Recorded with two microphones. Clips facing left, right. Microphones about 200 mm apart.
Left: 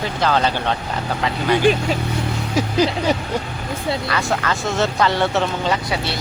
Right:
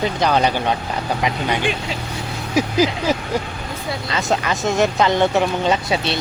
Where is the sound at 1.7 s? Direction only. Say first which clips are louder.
Left 7 dB; 40° left (ahead or behind).